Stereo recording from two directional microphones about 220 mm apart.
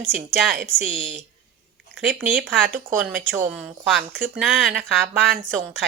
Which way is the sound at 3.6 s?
5° right (ahead or behind).